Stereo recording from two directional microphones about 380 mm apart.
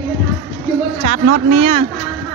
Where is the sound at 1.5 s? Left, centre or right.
Centre.